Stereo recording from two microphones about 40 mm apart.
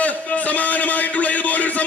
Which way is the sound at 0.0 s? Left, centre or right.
Left.